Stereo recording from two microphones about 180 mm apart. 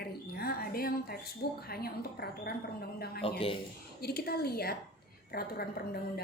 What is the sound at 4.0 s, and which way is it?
A woman's voice, 60° left (ahead or behind).